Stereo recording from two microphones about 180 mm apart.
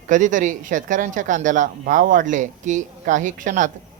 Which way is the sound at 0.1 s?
45° right (ahead or behind).